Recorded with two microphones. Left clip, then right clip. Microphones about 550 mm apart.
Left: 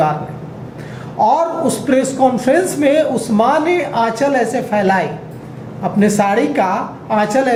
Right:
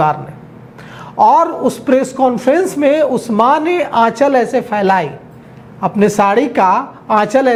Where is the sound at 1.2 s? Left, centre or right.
Right.